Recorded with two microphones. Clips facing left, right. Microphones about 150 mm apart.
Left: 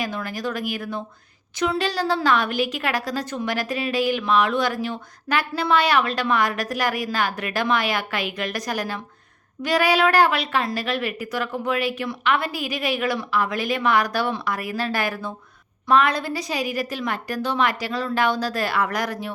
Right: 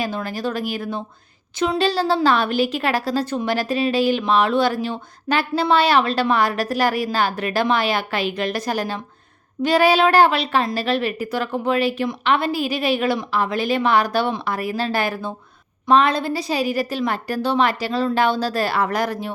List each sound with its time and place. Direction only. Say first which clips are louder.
0.0 s a woman's voice: right 3 dB; 30° right (ahead or behind)